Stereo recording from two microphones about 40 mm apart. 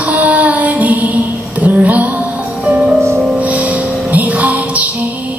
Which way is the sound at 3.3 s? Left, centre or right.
Right.